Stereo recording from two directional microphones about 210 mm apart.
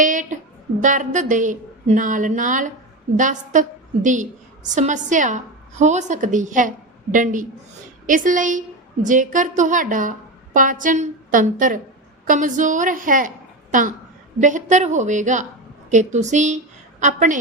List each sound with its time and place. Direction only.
0.0 s a woman's voice: 35° right (ahead or behind)